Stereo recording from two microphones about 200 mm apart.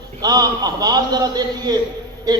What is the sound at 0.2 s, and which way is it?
A man's voice, 20° right (ahead or behind).